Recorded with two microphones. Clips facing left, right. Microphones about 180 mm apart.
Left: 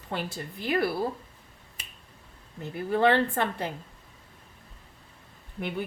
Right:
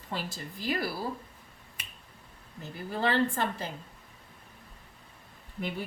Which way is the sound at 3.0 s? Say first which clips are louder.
Left 3 dB; 60° left (ahead or behind).